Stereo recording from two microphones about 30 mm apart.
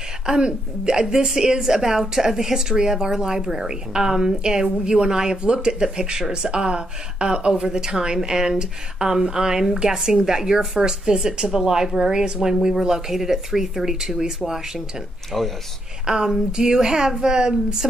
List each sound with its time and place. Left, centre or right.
0.3 s speech: right
15.3 s speech: centre
16.1 s speech: right